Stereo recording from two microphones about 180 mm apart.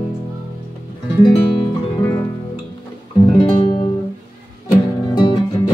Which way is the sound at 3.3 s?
25° left (ahead or behind).